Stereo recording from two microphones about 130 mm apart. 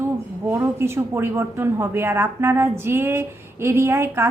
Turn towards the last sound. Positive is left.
turn(degrees=-20)  # may be behind; listen again after turning